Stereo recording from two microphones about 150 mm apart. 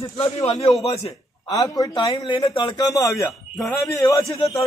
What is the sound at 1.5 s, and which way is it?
A man's voice, 25° left (ahead or behind).